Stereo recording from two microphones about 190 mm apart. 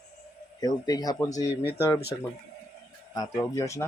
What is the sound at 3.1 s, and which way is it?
Speech, 20° left (ahead or behind).